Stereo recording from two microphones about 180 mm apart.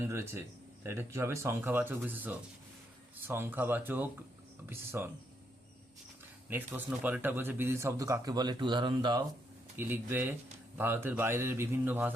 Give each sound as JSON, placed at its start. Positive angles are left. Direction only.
{"t": 0.0, "sound": "speech", "side_deg": -15}
{"t": 6.5, "sound": "speech", "side_deg": -10}
{"t": 9.7, "sound": "speech", "side_deg": -10}